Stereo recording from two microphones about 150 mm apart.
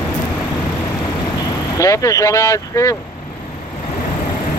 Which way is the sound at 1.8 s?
20° left (ahead or behind).